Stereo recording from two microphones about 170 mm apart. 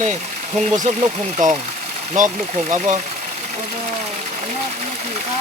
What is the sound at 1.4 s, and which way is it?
Speech, 50° right (ahead or behind).